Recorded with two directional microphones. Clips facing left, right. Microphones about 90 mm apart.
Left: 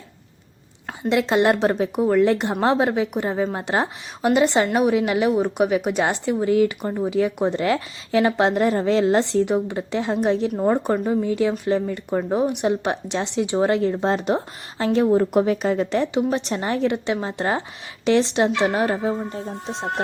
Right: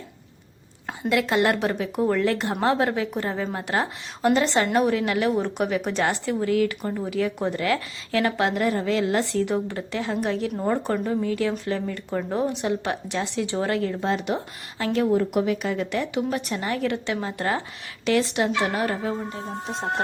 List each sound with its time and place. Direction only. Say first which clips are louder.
1.1 s a woman's voice: left 3 dB; 25° left (ahead or behind)
2.0 s a woman's voice: left 4 dB; 15° left (ahead or behind)